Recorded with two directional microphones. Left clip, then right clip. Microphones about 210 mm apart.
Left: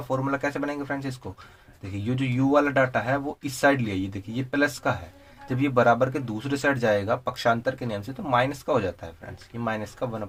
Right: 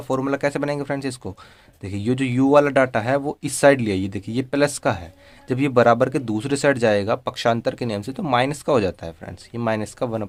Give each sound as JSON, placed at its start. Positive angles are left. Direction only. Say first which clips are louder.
{"t": 0.1, "sound": "speech", "louder": "right 5 dB", "side_deg": -45}